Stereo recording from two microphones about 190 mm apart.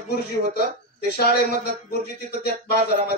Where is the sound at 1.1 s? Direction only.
55° left (ahead or behind).